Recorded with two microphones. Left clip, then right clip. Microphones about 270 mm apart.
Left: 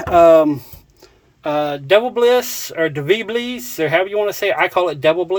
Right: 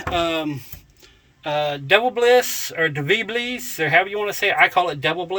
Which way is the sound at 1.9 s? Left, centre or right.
Centre.